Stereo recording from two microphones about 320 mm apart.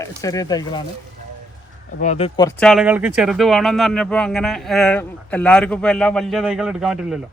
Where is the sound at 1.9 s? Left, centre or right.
Left; by 7.1 s centre.